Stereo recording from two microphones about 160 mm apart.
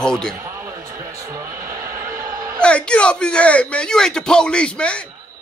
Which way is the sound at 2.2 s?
20° right (ahead or behind).